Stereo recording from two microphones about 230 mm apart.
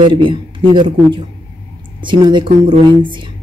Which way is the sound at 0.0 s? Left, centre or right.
Right.